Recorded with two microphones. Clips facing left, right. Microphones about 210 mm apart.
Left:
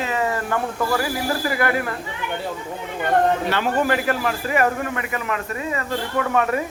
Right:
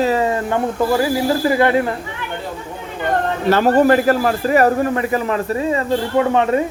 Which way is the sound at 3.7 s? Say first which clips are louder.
Right 8 dB; 40° right (ahead or behind).